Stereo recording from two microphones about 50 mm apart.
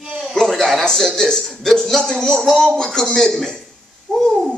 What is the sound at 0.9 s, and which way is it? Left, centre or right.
Speech, centre.